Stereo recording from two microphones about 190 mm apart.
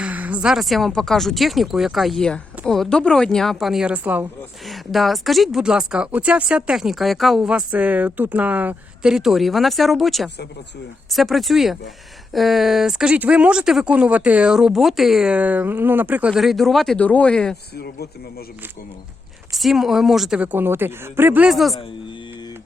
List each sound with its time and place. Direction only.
0.0 s speech: 10° right (ahead or behind)
17.7 s speech: 55° left (ahead or behind)
19.5 s speech: centre (ahead or behind)